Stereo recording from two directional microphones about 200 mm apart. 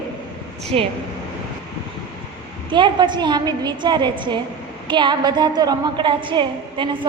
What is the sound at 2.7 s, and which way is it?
A woman's voice, 25° right (ahead or behind).